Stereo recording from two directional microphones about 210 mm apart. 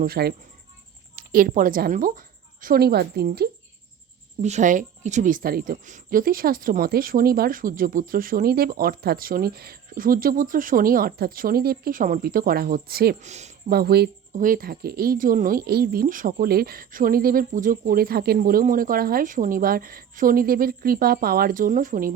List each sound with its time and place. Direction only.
0.0 s a woman's voice: 45° right (ahead or behind)
4.4 s speech: 35° right (ahead or behind)
13.2 s speech: 35° right (ahead or behind)
13.7 s speech: 45° right (ahead or behind)